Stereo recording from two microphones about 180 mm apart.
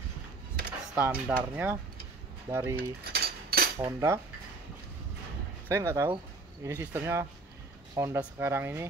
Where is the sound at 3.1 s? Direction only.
55° right (ahead or behind).